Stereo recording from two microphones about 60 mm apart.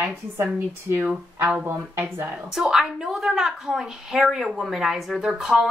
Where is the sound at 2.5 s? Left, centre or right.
Centre.